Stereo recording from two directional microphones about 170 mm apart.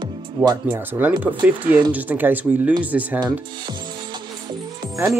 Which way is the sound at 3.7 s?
25° right (ahead or behind).